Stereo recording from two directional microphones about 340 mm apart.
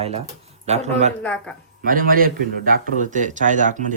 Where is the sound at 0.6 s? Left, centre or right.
Centre.